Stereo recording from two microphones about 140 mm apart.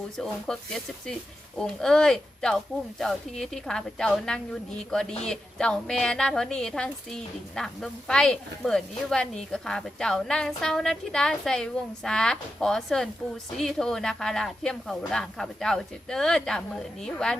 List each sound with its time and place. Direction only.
0.2 s speech: 5° left (ahead or behind)